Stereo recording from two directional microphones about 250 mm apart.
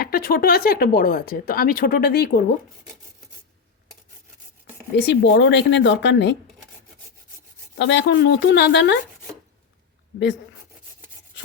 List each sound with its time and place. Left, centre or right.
0.0 s speech: left
4.9 s speech: left
7.8 s speech: left